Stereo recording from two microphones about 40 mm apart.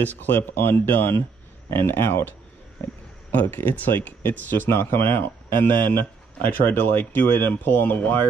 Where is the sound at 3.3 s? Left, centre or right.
Left.